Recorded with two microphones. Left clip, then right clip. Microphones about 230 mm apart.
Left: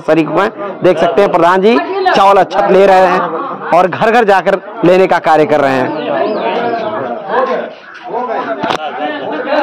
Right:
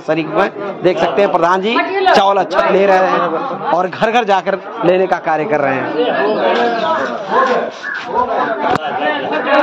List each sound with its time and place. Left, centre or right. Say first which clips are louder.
0.1 s a man's voice: left 4 dB; left